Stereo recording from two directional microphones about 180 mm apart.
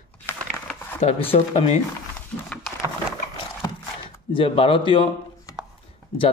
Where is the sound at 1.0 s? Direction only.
35° left (ahead or behind).